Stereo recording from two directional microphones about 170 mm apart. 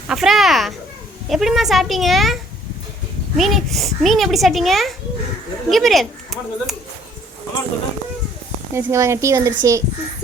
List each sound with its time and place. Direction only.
0.1 s speech: centre (ahead or behind)
8.7 s speech: 15° right (ahead or behind)